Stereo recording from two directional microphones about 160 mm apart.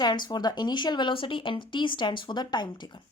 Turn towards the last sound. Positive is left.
turn(degrees=25)  # may be behind; listen again after turning